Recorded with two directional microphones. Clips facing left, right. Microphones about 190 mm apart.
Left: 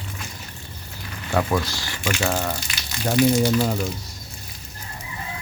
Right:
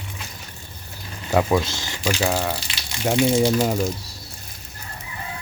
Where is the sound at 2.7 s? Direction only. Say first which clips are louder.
Left 1 dB; 25° right (ahead or behind).